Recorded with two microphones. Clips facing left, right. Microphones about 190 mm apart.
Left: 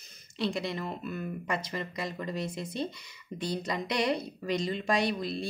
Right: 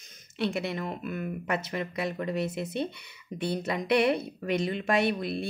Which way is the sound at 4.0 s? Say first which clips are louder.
Right 4 dB; 60° right (ahead or behind).